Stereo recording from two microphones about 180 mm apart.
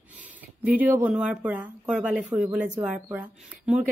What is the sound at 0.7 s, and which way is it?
Speech, 10° right (ahead or behind).